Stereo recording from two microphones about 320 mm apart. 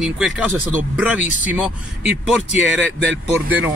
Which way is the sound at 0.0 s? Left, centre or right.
Centre.